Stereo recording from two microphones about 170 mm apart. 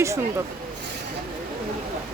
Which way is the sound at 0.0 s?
15° right (ahead or behind).